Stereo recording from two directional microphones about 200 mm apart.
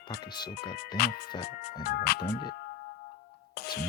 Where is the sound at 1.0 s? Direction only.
55° left (ahead or behind).